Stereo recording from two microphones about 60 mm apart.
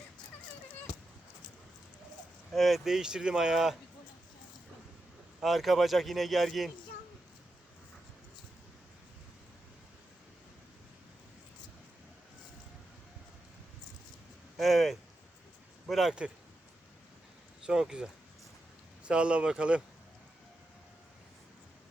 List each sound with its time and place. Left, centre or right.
2.5 s speech: centre
5.4 s speech: centre
14.5 s speech: centre
17.7 s speech: centre